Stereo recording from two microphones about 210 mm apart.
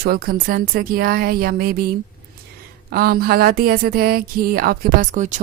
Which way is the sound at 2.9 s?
45° right (ahead or behind).